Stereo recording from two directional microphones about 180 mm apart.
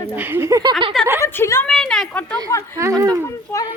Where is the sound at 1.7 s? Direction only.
5° left (ahead or behind).